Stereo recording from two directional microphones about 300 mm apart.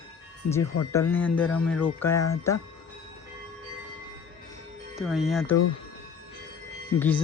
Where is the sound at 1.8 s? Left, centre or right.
Centre.